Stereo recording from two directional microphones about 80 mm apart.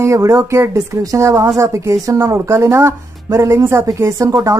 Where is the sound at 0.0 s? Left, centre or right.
Right.